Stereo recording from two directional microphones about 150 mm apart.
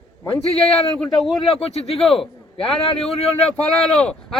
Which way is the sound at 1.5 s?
40° left (ahead or behind).